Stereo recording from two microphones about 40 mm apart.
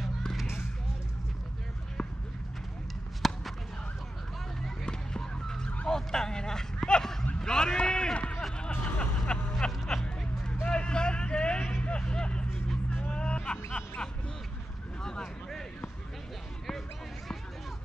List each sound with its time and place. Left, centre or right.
3.2 s basketball bounce: centre
5.2 s car alarm: centre
5.9 s a sound: centre
8.4 s hubbub: centre
8.6 s vehicle: left
9.9 s a sound: centre
10.7 s vehicle: left
13.1 s hubbub: left
15.0 s vehicle: centre